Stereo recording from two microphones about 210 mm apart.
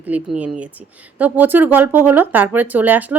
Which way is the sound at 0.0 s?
5° right (ahead or behind).